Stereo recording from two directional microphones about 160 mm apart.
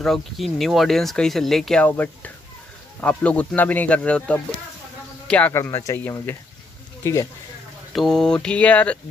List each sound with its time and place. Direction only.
0.0 s speech: centre (ahead or behind); by 7.2 s 20° left (ahead or behind)
7.9 s speech: centre (ahead or behind)